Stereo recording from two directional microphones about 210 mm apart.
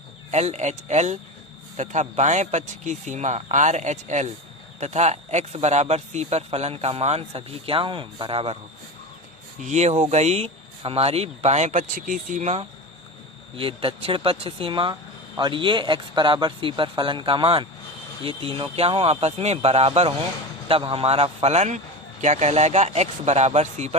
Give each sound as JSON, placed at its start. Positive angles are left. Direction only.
{"t": 0.3, "sound": "speech", "side_deg": -30}
{"t": 9.6, "sound": "speech", "side_deg": -35}